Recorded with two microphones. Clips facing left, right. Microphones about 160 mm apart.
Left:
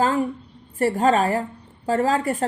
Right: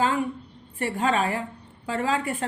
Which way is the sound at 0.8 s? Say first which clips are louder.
Left 6 dB; 40° left (ahead or behind).